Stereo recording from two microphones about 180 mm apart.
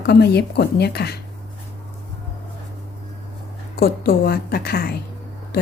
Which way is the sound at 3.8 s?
55° left (ahead or behind).